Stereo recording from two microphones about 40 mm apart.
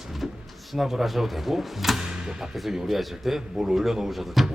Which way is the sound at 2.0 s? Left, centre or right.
Centre.